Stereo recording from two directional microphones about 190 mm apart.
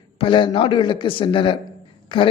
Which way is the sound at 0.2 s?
25° left (ahead or behind).